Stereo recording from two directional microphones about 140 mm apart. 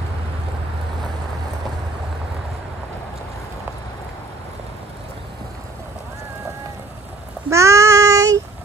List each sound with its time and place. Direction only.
7.4 s child singing: 20° right (ahead or behind)